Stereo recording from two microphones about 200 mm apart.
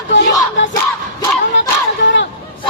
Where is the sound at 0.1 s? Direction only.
65° left (ahead or behind).